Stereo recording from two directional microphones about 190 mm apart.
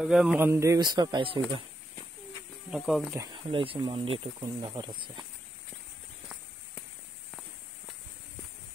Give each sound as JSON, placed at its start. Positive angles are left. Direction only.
{"t": 0.0, "sound": "speech", "side_deg": 0}
{"t": 2.7, "sound": "speech", "side_deg": 0}
{"t": 3.5, "sound": "speech", "side_deg": -30}